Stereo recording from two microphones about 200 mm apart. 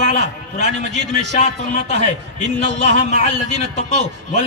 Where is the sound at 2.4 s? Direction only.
60° right (ahead or behind).